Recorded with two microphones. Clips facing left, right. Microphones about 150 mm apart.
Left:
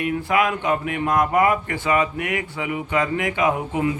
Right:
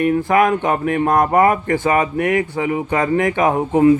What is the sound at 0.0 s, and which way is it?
Speech, 45° right (ahead or behind).